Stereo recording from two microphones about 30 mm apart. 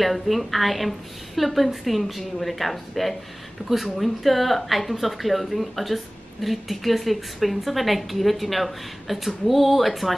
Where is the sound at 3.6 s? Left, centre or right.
Right.